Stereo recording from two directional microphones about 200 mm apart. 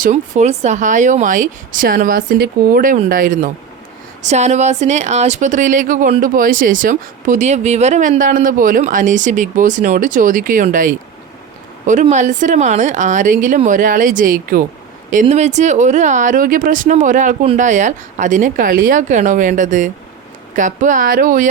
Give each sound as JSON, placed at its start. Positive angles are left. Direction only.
{"t": 0.0, "sound": "speech", "side_deg": -35}